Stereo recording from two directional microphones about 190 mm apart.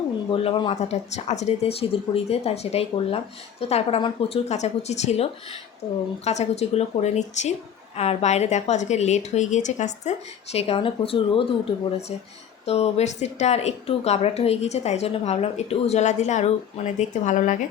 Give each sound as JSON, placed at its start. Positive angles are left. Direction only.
{"t": 0.3, "sound": "speech", "side_deg": 25}